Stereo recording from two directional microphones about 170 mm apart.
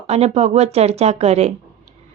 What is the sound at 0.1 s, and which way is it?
A woman's voice, 40° right (ahead or behind).